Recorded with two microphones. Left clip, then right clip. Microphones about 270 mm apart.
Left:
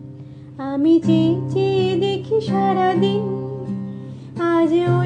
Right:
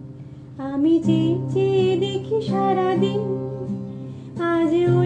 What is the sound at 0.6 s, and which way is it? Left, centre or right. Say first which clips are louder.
Music: left 3 dB; centre.